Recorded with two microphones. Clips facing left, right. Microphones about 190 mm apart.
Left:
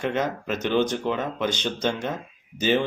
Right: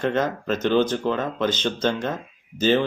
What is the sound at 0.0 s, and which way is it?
Speech, 10° left (ahead or behind).